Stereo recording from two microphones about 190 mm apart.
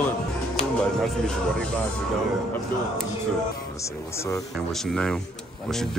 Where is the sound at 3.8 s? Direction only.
15° left (ahead or behind).